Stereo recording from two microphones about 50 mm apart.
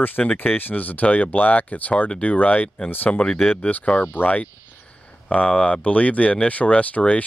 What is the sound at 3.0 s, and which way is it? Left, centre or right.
Speech, centre.